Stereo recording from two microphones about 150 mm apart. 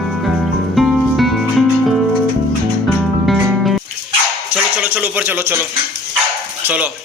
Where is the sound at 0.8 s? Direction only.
Centre (ahead or behind).